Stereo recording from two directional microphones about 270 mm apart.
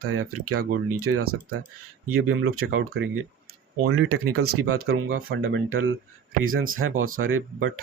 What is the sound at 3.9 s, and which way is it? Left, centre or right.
Speech, right.